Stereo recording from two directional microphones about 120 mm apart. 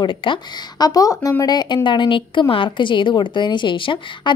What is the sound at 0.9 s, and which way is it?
A woman's voice, 30° left (ahead or behind).